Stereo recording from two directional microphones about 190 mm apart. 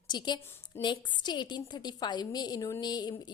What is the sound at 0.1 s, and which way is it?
A woman's voice, 20° left (ahead or behind).